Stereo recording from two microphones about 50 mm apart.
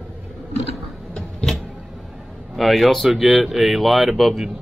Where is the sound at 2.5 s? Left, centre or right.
Centre.